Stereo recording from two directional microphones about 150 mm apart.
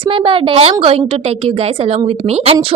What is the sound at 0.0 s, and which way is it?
A woman's voice, 35° right (ahead or behind).